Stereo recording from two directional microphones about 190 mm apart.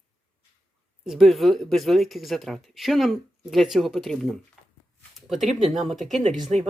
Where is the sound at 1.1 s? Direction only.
Centre (ahead or behind).